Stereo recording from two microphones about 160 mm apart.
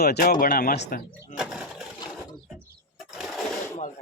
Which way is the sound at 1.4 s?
5° right (ahead or behind).